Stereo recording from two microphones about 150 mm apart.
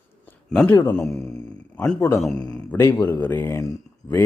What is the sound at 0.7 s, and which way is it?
Speech, 20° left (ahead or behind).